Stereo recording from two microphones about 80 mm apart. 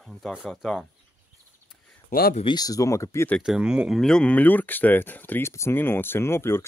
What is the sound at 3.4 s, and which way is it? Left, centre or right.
Speech, centre.